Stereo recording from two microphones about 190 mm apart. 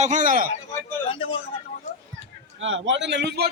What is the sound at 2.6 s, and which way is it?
Speech, 85° right.